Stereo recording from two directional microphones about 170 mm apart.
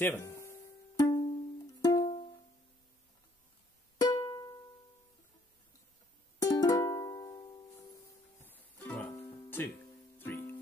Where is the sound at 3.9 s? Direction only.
25° left (ahead or behind).